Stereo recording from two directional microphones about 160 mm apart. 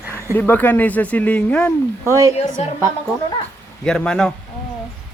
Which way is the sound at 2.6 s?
40° left (ahead or behind).